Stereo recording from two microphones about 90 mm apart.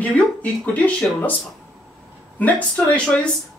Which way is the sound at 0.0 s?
15° left (ahead or behind).